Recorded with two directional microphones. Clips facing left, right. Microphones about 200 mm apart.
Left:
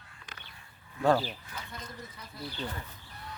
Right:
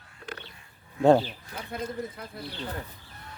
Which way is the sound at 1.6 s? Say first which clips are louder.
Right 10 dB; 60° right (ahead or behind).